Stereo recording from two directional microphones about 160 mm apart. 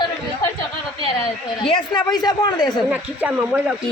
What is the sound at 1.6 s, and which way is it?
A woman's voice, 30° left (ahead or behind).